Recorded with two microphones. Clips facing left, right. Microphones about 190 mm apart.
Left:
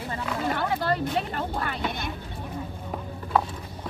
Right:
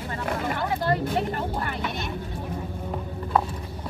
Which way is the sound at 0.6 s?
20° right (ahead or behind).